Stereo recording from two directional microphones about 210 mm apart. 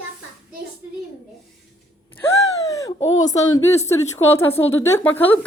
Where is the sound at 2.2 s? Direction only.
15° left (ahead or behind).